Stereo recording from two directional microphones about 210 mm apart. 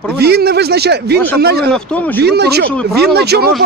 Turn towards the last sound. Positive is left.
turn(degrees=-50)  # may be behind; listen again after turning